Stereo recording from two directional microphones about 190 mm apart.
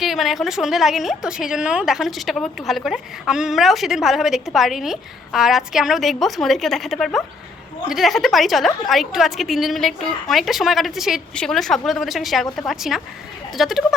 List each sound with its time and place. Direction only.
0.0 s a woman's voice: centre (ahead or behind)